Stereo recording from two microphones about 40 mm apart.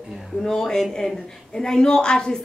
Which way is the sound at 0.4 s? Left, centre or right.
Centre.